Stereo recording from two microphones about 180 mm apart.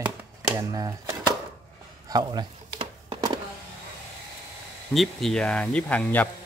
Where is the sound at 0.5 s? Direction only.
20° right (ahead or behind).